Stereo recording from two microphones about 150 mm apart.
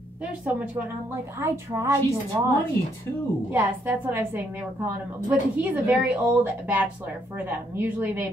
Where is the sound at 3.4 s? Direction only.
15° right (ahead or behind).